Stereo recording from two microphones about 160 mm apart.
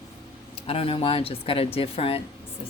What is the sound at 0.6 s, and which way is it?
Speech, 35° left (ahead or behind).